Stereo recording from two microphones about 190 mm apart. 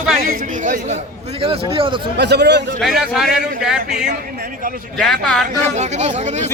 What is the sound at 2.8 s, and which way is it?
A man's voice, centre (ahead or behind).